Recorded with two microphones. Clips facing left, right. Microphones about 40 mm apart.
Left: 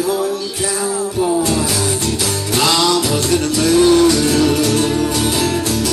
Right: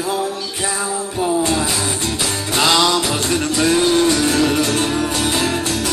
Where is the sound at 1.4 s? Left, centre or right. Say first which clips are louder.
Left 1 dB; right.